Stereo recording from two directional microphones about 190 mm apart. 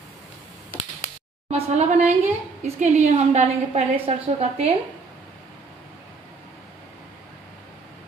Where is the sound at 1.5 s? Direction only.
35° right (ahead or behind).